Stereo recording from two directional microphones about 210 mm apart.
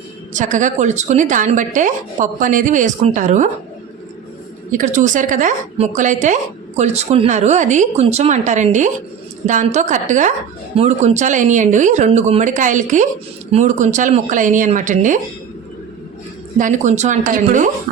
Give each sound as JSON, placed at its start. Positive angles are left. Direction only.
{"t": 0.3, "sound": "a woman's voice", "side_deg": -35}
{"t": 4.7, "sound": "a woman's voice", "side_deg": -35}
{"t": 16.6, "sound": "a woman's voice", "side_deg": -35}